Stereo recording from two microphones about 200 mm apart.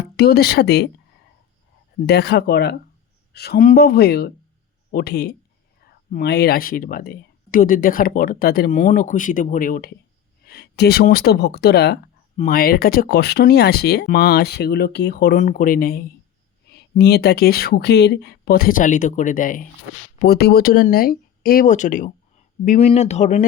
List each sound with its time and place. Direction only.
0.2 s speech: 50° left (ahead or behind)
2.0 s speech: 55° left (ahead or behind)
20.1 s speech: 50° left (ahead or behind); by 23.5 s 35° left (ahead or behind)